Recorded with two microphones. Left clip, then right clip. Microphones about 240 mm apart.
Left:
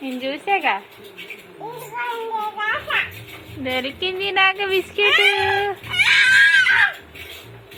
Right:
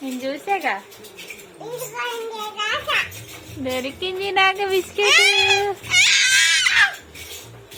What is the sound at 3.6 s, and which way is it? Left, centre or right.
A woman's voice, centre.